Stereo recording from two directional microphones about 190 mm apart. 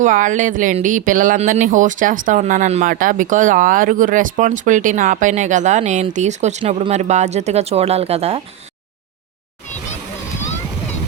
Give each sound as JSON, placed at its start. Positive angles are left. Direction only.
{"t": 0.0, "sound": "speech", "side_deg": -40}